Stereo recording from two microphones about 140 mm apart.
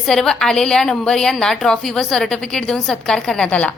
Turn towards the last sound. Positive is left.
turn(degrees=10)  # may be behind; listen again after turning